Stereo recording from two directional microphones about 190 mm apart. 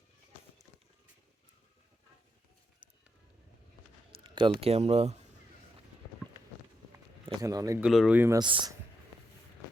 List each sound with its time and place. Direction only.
4.1 s speech: 25° right (ahead or behind)
7.4 s speech: 15° right (ahead or behind)
7.8 s speech: 5° right (ahead or behind)
8.4 s speech: 25° right (ahead or behind)